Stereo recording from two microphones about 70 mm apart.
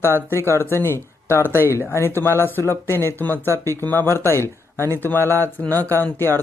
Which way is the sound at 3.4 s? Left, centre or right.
Right.